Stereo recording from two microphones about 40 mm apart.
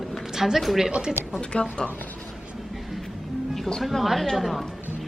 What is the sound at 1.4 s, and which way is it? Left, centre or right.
Speech, left.